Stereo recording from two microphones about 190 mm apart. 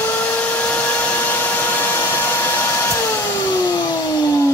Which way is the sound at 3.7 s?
20° left (ahead or behind).